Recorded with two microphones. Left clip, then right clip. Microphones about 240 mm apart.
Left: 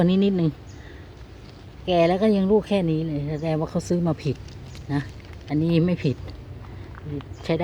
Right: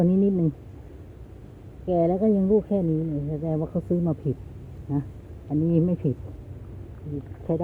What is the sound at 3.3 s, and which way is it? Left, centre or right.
Speech, left.